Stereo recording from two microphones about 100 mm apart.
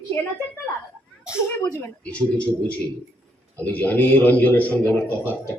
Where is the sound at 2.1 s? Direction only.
10° left (ahead or behind).